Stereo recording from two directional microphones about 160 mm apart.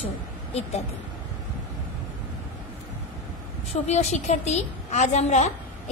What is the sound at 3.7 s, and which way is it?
A woman's voice, 40° left (ahead or behind).